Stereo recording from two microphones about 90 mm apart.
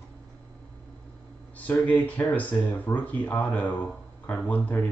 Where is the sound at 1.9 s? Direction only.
15° left (ahead or behind).